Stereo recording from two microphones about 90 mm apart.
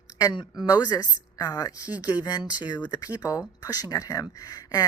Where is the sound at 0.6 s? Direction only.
50° left (ahead or behind).